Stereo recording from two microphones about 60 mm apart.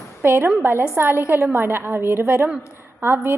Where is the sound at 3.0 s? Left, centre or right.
Right.